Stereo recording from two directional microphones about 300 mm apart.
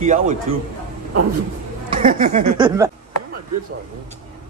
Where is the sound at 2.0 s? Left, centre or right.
Right.